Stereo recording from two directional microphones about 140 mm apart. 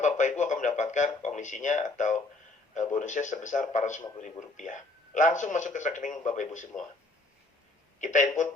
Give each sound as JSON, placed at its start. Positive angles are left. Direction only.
{"t": 0.0, "sound": "a man's voice", "side_deg": 60}
{"t": 8.0, "sound": "a man's voice", "side_deg": 60}